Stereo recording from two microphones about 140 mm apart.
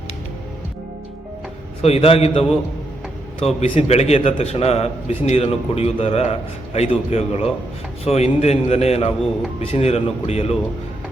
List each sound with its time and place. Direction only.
1.8 s a man's voice: 45° left (ahead or behind)
3.4 s a man's voice: 50° left (ahead or behind)